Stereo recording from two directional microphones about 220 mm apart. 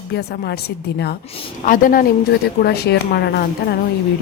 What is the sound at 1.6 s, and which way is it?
A woman's voice, 40° left (ahead or behind).